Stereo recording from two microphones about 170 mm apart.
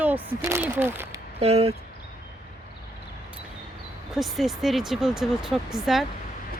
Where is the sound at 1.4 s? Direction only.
40° right (ahead or behind).